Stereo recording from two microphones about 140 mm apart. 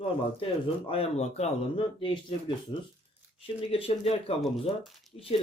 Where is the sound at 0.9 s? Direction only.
45° left (ahead or behind).